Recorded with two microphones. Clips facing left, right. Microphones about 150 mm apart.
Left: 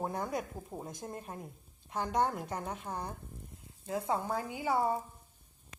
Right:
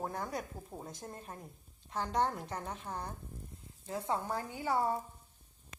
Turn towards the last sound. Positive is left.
turn(degrees=15)  # may be behind; listen again after turning